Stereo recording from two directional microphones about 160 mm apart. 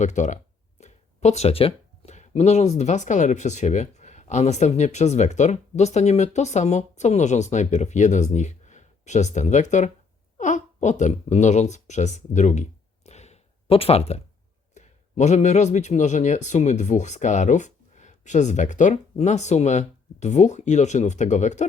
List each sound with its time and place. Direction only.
0.0 s speech: 50° left (ahead or behind)
13.1 s a sound: 45° left (ahead or behind)
14.8 s speech: 45° left (ahead or behind)